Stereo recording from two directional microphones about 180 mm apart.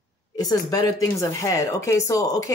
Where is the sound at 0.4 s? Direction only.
20° left (ahead or behind).